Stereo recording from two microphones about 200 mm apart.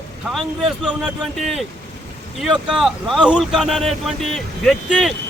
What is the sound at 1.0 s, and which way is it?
Speech, centre (ahead or behind).